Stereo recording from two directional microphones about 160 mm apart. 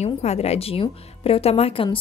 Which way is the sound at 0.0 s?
40° left (ahead or behind).